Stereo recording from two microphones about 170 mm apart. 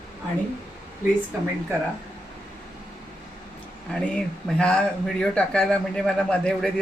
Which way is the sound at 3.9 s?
5° left (ahead or behind).